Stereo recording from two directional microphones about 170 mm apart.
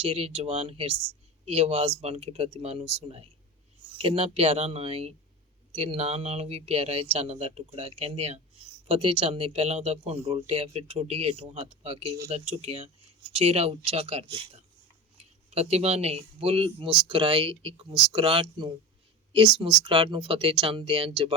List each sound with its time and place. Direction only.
0.0 s speech: 35° right (ahead or behind)